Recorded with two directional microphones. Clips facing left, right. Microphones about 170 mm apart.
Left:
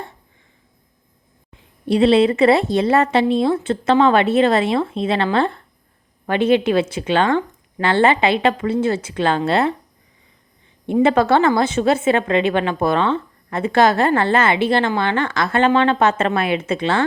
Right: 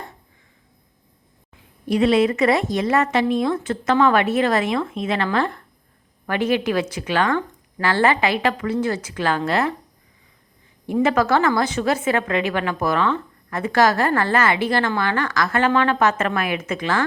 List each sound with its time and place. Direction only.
1.9 s speech: 30° left (ahead or behind)
10.8 s speech: 25° left (ahead or behind)